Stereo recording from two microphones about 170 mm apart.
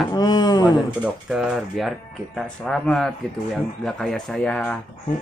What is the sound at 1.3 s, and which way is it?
Speech, 5° right (ahead or behind).